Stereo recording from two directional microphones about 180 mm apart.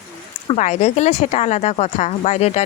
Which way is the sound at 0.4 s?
40° left (ahead or behind).